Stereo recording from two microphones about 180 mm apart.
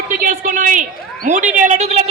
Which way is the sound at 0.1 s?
50° right (ahead or behind).